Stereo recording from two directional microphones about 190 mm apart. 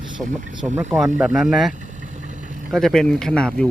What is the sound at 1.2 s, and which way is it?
Speech, 5° right (ahead or behind).